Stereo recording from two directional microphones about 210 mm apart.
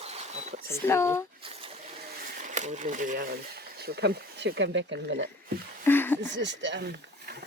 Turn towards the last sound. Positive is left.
turn(degrees=-60)  # may be behind; listen again after turning